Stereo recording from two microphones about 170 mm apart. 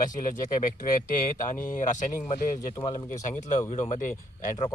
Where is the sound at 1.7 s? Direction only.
50° left (ahead or behind).